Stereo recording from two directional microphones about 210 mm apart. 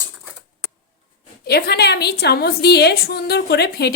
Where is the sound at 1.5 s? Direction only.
50° left (ahead or behind).